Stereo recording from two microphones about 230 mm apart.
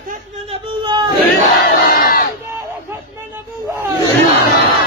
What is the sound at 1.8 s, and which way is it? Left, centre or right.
Crowd, left.